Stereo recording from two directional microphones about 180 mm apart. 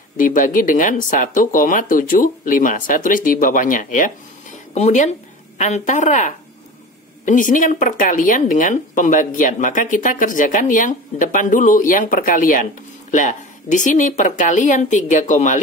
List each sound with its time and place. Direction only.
0.2 s a woman's voice: 50° left (ahead or behind)